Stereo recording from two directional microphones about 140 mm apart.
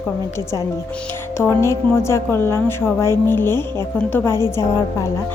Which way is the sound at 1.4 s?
20° left (ahead or behind).